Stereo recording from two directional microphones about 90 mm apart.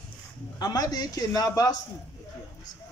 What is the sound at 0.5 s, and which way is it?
Speech, 45° left (ahead or behind).